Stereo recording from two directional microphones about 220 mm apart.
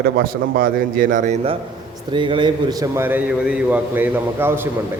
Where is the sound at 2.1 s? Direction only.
20° right (ahead or behind).